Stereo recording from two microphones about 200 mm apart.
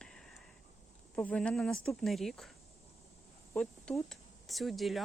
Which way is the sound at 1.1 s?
5° left (ahead or behind).